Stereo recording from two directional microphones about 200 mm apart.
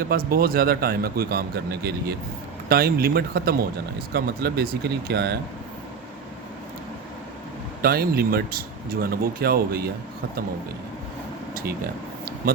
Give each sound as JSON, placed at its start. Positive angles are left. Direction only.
{"t": 0.0, "sound": "speech", "side_deg": -50}
{"t": 7.8, "sound": "speech", "side_deg": -50}
{"t": 11.5, "sound": "speech", "side_deg": -50}